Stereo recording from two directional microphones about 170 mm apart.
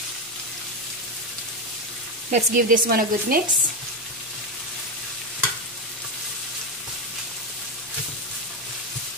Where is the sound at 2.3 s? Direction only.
50° right (ahead or behind).